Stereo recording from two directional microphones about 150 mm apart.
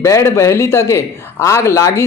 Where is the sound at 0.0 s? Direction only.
20° left (ahead or behind).